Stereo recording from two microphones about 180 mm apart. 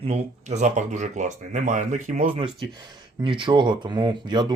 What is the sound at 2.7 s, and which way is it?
Speech, 25° right (ahead or behind).